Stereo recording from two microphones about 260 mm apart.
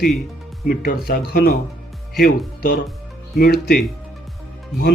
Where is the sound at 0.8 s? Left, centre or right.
Left.